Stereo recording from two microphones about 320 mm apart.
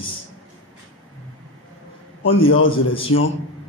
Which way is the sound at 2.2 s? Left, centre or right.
Left.